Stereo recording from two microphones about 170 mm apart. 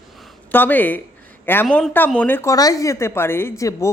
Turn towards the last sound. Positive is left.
turn(degrees=20)  # may be behind; listen again after turning